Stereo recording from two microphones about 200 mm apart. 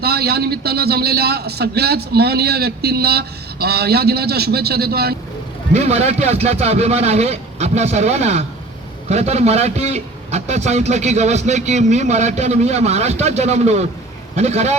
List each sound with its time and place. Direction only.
0.0 s a man's voice: 50° right (ahead or behind)
5.7 s a man's voice: 30° right (ahead or behind)